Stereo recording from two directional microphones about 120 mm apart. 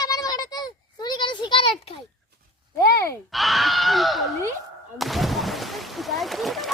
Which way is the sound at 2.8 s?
25° left (ahead or behind).